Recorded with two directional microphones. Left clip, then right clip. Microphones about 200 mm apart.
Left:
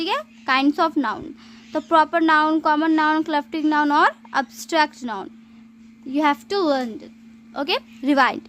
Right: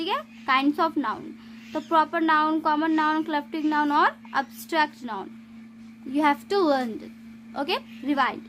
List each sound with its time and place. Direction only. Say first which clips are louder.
0.0 s a child's voice: left 4 dB; 30° left (ahead or behind)
8.0 s speech: left 7 dB; 35° left (ahead or behind)